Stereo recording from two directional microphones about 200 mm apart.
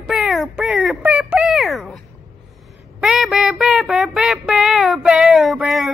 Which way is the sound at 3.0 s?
Centre (ahead or behind).